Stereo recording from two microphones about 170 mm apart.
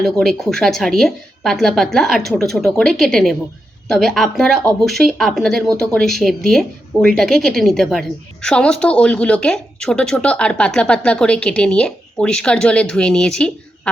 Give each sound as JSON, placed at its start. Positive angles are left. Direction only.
{"t": 0.0, "sound": "a woman's voice", "side_deg": 0}